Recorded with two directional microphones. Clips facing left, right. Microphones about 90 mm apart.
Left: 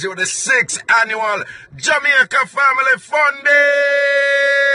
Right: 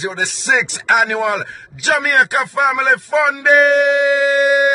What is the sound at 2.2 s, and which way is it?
Speech, 10° right (ahead or behind).